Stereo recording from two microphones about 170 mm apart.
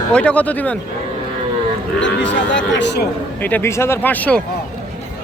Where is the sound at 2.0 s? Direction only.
90° left.